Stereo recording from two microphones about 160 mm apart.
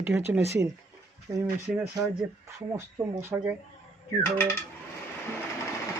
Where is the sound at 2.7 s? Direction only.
15° right (ahead or behind).